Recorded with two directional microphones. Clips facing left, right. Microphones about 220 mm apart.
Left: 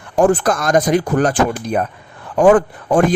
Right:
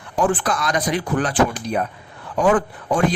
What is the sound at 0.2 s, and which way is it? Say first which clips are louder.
A man's voice: left 6 dB; 45° left (ahead or behind).